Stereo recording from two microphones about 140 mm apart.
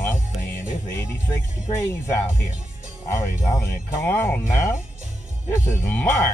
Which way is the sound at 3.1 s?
20° left (ahead or behind).